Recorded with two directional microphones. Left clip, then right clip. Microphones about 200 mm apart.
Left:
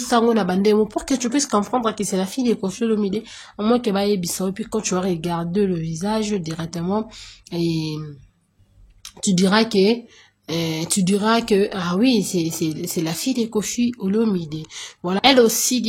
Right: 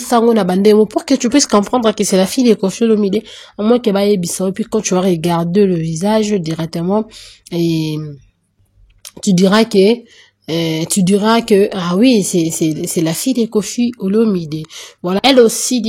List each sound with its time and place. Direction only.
0.0 s speech: 35° right (ahead or behind)
9.2 s a woman's voice: 30° right (ahead or behind)